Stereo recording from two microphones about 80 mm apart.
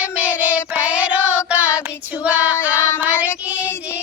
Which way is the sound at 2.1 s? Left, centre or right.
Centre.